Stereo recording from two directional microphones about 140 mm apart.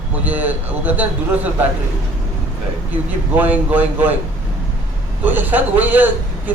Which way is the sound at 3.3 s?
10° right (ahead or behind).